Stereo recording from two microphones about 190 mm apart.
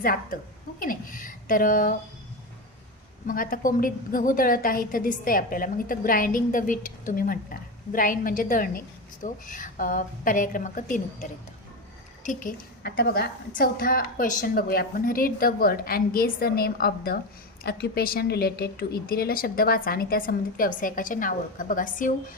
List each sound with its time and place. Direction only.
0.0 s a woman's voice: 50° left (ahead or behind)
3.2 s a woman's voice: 45° left (ahead or behind)
13.0 s a woman's voice: 60° left (ahead or behind)
13.6 s a woman's voice: 50° left (ahead or behind)